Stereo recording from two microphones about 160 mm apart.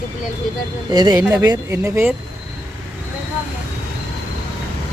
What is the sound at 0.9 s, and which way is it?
Speech, 25° right (ahead or behind).